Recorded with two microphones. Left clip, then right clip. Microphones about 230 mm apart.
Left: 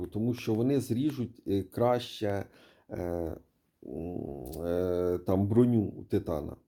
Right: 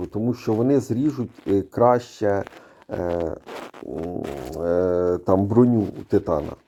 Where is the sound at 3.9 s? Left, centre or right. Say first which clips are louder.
Right 9 dB; centre.